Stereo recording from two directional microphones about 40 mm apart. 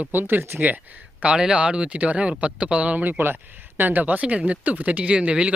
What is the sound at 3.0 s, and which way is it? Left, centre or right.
Speech, right.